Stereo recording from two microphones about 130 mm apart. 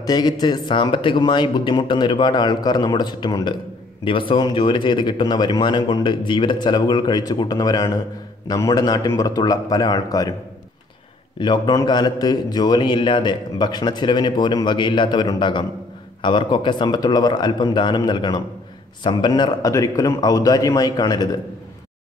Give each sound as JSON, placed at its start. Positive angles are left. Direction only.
{"t": 0.0, "sound": "a man's voice", "side_deg": 30}
{"t": 11.3, "sound": "a man's voice", "side_deg": 35}